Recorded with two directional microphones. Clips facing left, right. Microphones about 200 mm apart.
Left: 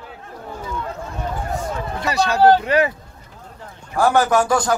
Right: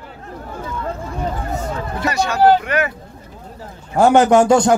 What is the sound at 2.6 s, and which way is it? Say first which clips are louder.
Speech: left 2 dB; 30° left (ahead or behind).